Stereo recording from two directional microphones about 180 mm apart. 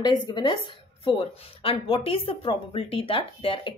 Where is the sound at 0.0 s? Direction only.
25° left (ahead or behind).